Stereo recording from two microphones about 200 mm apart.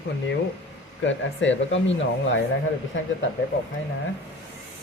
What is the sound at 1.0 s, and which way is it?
Speech, 65° left (ahead or behind).